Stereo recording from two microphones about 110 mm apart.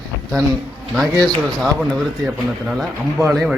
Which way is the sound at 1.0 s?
35° right (ahead or behind).